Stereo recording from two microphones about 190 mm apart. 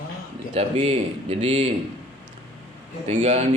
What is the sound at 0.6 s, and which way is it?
A man's voice, 30° right (ahead or behind).